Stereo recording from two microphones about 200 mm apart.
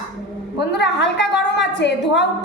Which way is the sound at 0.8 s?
60° left (ahead or behind).